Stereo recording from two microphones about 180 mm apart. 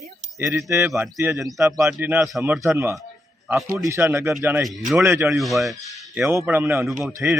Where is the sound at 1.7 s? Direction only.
15° right (ahead or behind).